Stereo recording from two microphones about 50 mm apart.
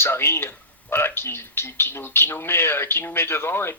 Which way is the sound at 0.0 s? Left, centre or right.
Left.